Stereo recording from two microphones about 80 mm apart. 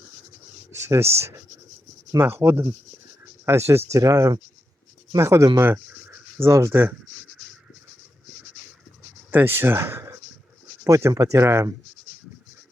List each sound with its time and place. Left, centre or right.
0.7 s speech: right
2.2 s speech: right
5.5 s speech: right
9.3 s speech: right